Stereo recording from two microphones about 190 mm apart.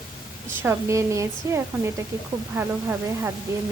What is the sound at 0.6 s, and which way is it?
A woman's voice, 15° right (ahead or behind).